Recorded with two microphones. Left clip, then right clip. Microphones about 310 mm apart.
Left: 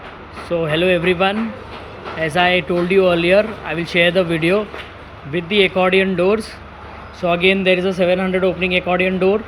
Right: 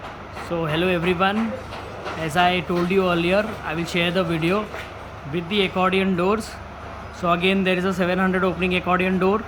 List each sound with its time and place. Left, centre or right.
0.4 s a man's voice: centre